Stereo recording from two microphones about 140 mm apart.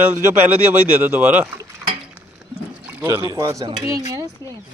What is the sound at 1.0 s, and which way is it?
Speech, 15° right (ahead or behind).